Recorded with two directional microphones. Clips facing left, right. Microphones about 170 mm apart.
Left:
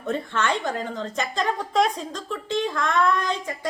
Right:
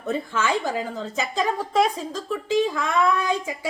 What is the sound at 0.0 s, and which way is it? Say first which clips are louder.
A woman's voice: right 1 dB; 5° right (ahead or behind).